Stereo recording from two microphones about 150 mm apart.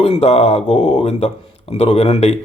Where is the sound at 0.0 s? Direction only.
45° left (ahead or behind).